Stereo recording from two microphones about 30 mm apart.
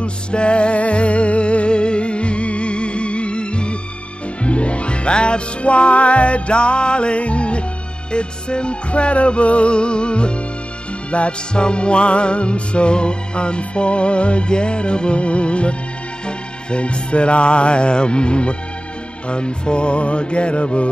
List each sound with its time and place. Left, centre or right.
0.0 s music: left